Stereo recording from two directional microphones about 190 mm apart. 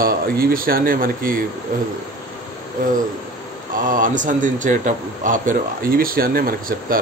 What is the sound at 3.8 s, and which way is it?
A man's voice, 45° right (ahead or behind).